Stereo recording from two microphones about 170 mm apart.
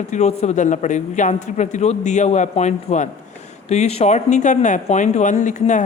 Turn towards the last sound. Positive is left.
turn(degrees=45)  # may be behind; listen again after turning